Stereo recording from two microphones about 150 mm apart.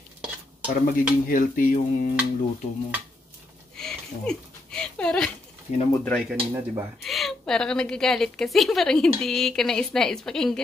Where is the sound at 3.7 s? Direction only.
5° left (ahead or behind).